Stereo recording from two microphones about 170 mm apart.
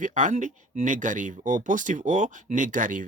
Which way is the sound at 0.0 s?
45° right (ahead or behind).